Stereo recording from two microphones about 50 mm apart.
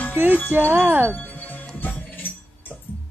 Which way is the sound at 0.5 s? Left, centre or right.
Right.